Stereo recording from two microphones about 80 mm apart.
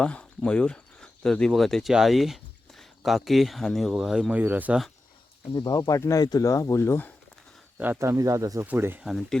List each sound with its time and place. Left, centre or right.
0.0 s speech: centre
4.4 s speech: right
5.5 s speech: left
6.0 s speech: left
7.9 s speech: right
8.6 s speech: right
9.0 s speech: centre